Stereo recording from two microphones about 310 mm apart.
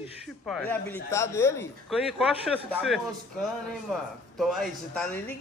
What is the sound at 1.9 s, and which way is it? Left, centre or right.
A man's voice, centre.